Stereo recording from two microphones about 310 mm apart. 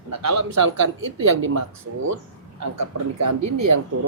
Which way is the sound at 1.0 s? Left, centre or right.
Right.